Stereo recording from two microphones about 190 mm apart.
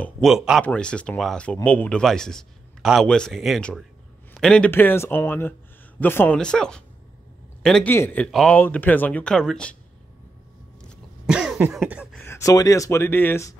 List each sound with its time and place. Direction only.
0.0 s speech: centre (ahead or behind)
10.8 s cough: 5° right (ahead or behind)
12.2 s speech: 15° left (ahead or behind)